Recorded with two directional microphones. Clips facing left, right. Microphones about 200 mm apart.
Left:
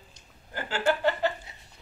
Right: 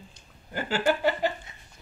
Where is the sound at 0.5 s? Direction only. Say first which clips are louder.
Right 2 dB; 15° right (ahead or behind).